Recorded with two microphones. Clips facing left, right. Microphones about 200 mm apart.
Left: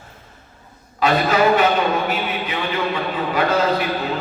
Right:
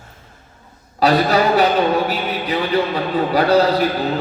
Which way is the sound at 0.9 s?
35° right (ahead or behind).